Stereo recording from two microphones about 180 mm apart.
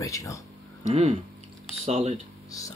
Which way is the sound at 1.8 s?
35° right (ahead or behind).